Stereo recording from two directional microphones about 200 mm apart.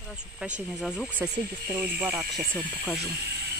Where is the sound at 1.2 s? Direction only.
55° right (ahead or behind).